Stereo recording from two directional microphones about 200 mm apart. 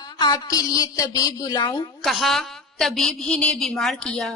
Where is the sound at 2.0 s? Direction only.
Centre (ahead or behind).